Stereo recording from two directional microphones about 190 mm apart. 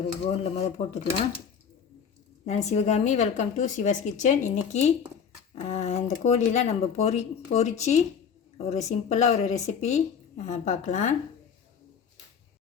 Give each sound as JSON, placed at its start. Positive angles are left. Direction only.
{"t": 0.3, "sound": "speech", "side_deg": 35}
{"t": 2.5, "sound": "speech", "side_deg": 35}